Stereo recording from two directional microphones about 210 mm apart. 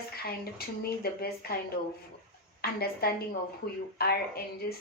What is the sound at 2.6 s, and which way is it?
Speech, 45° left (ahead or behind).